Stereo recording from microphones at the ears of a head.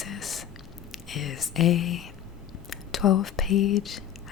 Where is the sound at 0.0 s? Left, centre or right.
Left.